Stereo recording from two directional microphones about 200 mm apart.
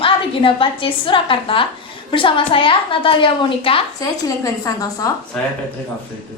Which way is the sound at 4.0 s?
15° left (ahead or behind).